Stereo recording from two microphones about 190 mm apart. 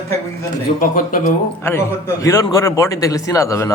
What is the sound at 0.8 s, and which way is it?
Speech, 45° left (ahead or behind).